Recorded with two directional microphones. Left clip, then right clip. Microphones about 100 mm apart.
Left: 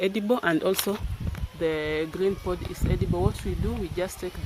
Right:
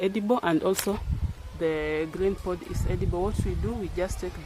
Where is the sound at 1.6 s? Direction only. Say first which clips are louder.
Even; 15° left (ahead or behind).